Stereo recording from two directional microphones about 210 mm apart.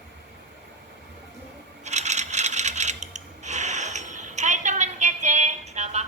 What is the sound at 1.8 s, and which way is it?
Coin, 35° right (ahead or behind).